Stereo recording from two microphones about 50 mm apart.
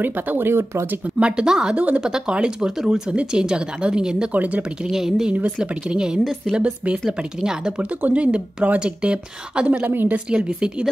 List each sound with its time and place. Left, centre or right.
0.0 s speech: right
1.2 s a woman's voice: centre
4.3 s speech: right
4.8 s a woman's voice: centre
5.3 s speech: right
7.1 s a woman's voice: centre
9.8 s speech: right
10.1 s speech: right